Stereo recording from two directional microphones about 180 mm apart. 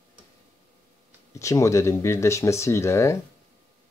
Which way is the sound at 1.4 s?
15° left (ahead or behind).